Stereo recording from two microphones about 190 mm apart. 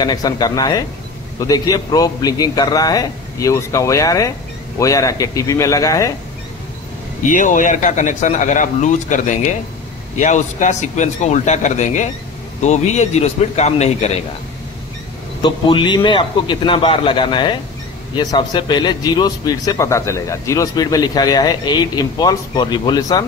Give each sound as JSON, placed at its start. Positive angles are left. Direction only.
{"t": 0.0, "sound": "a man's voice", "side_deg": 20}
{"t": 7.2, "sound": "a man's voice", "side_deg": 45}
{"t": 15.4, "sound": "a man's voice", "side_deg": 25}